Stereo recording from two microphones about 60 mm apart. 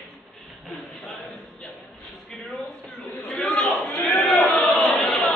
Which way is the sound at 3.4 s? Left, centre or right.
Centre.